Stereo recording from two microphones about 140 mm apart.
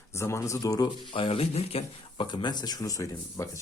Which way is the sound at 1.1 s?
40° left (ahead or behind).